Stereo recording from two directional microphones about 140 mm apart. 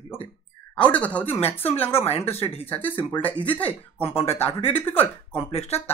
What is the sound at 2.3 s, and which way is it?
Speech, 45° left (ahead or behind).